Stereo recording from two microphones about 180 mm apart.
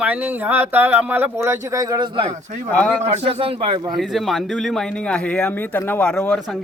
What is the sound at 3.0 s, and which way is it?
Speech, 35° right (ahead or behind).